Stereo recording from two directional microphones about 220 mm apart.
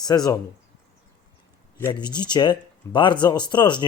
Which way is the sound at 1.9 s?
20° left (ahead or behind).